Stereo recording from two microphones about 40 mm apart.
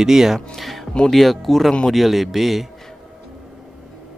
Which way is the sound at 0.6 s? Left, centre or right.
Centre.